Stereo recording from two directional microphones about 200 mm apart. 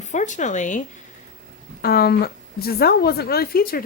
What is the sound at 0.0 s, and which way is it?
Speech, 35° left (ahead or behind).